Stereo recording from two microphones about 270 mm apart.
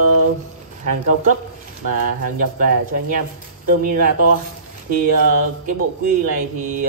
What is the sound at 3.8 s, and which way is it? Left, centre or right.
Speech, right.